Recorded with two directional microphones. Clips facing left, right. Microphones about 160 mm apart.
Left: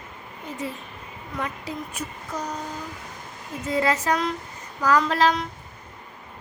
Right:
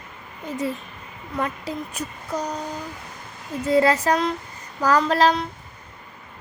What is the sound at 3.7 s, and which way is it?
A woman's voice, 35° right (ahead or behind).